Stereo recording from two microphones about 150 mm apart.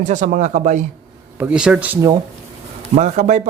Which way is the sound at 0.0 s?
55° right (ahead or behind).